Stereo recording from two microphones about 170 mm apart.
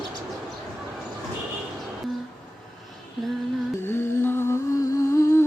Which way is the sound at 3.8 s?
15° left (ahead or behind).